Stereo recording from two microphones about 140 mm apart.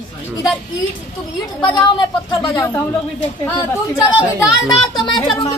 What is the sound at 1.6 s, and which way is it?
Speech, 35° left (ahead or behind).